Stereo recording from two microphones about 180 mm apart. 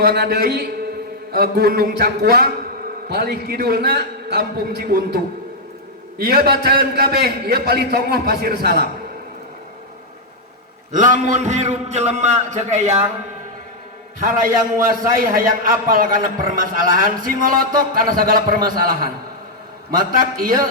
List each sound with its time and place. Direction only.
0.0 s a man's voice: 60° right (ahead or behind)
10.9 s a man's voice: 45° right (ahead or behind)
14.2 s a man's voice: 50° right (ahead or behind)